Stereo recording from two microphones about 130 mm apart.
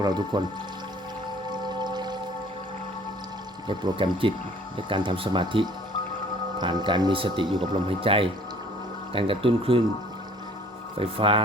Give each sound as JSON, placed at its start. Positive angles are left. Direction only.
{"t": 0.0, "sound": "speech", "side_deg": -35}
{"t": 1.8, "sound": "music", "side_deg": -35}
{"t": 3.7, "sound": "speech", "side_deg": -35}
{"t": 10.9, "sound": "speech", "side_deg": -45}